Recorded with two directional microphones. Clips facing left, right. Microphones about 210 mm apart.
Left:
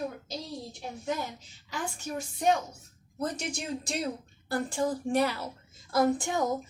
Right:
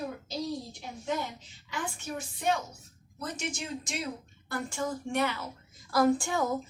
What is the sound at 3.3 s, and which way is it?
A woman's voice, 35° left (ahead or behind).